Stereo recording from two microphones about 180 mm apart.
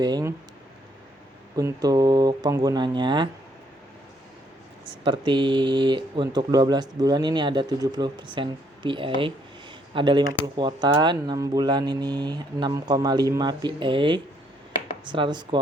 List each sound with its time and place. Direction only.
0.0 s speech: 20° right (ahead or behind)
1.5 s speech: 20° right (ahead or behind)
5.0 s speech: 25° right (ahead or behind)